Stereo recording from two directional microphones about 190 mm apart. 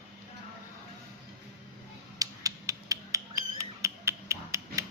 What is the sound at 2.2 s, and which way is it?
Squawk, 20° right (ahead or behind).